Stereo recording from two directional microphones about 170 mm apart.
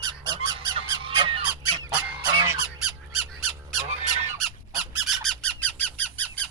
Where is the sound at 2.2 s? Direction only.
20° right (ahead or behind).